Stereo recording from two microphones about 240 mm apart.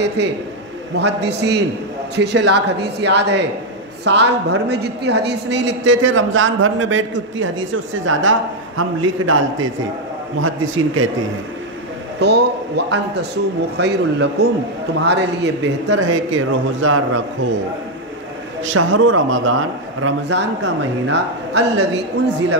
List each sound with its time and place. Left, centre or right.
0.9 s a woman's voice: right
12.2 s a woman's voice: right
18.6 s a woman's voice: right